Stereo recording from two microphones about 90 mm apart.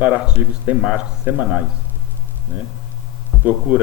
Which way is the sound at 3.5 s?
15° right (ahead or behind).